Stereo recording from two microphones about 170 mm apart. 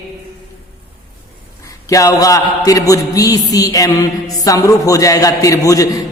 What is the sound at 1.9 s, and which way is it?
A man's voice, 20° left (ahead or behind).